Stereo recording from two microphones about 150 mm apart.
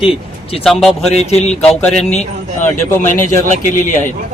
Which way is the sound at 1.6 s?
5° left (ahead or behind).